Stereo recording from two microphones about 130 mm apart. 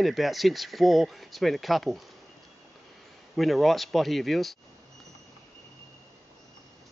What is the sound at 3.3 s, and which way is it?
Speech, centre (ahead or behind).